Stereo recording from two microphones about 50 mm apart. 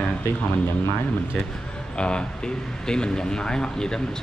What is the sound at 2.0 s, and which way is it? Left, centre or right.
Speech, centre.